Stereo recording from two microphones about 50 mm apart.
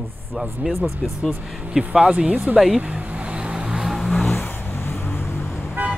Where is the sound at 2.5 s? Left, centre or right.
Centre.